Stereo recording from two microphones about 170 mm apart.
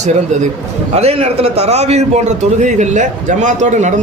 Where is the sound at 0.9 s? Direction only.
35° right (ahead or behind).